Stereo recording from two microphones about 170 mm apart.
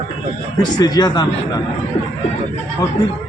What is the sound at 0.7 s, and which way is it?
Speech, 25° left (ahead or behind).